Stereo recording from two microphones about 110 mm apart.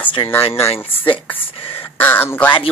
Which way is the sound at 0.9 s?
55° left (ahead or behind).